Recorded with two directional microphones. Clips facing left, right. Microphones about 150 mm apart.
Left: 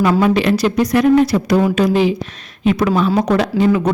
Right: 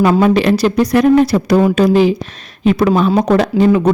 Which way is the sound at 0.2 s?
40° right (ahead or behind).